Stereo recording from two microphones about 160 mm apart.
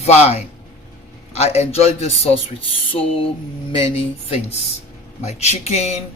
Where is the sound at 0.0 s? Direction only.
40° left (ahead or behind).